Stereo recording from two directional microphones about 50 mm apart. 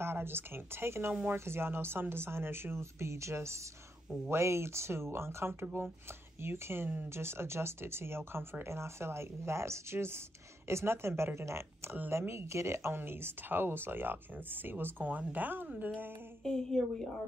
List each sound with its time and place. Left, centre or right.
0.0 s speech: right
12.9 s speech: right
16.4 s a woman's voice: centre